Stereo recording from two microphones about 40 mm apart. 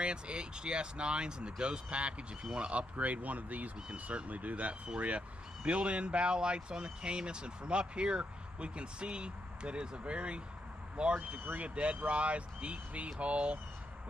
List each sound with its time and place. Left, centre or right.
0.0 s speech: right
3.0 s speech: right